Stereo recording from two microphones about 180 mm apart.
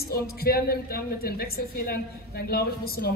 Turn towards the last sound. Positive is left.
turn(degrees=55)  # may be behind; listen again after turning